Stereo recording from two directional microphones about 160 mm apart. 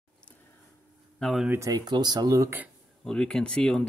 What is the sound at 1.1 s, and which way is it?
Speech, centre (ahead or behind).